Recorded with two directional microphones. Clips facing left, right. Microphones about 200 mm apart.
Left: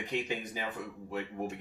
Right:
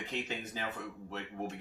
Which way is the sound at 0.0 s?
15° left (ahead or behind).